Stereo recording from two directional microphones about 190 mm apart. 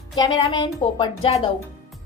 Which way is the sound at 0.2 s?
25° left (ahead or behind).